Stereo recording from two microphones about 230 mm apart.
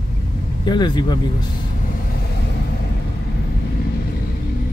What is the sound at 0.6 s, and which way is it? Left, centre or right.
Speech, centre.